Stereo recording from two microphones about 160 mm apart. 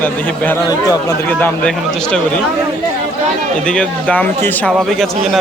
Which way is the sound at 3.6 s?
5° left (ahead or behind).